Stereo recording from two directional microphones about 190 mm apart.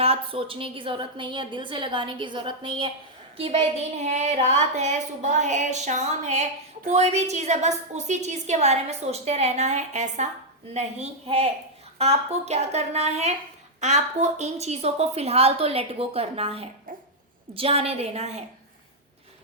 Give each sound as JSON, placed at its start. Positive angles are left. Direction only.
{"t": 0.0, "sound": "a woman's voice", "side_deg": -30}